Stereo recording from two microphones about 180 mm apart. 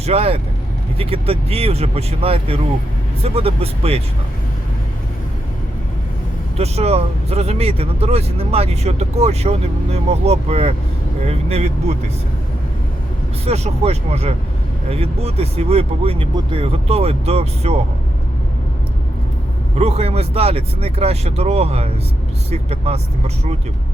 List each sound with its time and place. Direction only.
0.0 s speech: 35° right (ahead or behind)
6.6 s speech: 35° right (ahead or behind)
13.4 s speech: 35° right (ahead or behind)
19.7 s speech: 35° right (ahead or behind)